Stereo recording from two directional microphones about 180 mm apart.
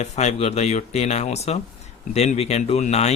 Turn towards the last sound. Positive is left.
turn(degrees=35)  # may be behind; listen again after turning